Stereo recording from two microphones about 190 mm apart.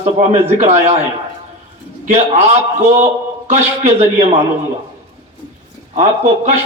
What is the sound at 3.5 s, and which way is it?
Speech, 35° right (ahead or behind).